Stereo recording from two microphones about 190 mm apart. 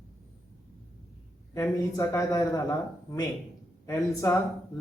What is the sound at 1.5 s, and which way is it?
Speech, 15° left (ahead or behind).